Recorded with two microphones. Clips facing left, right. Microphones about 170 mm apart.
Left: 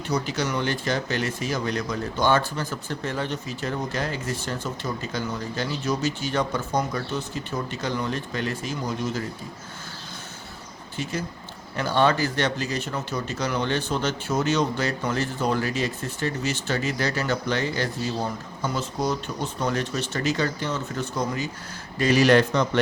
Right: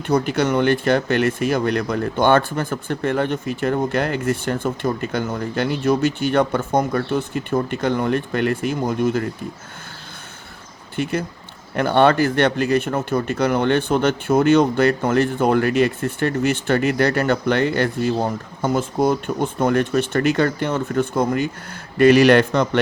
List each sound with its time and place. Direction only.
0.1 s speech: 55° right (ahead or behind)
10.9 s speech: 60° right (ahead or behind)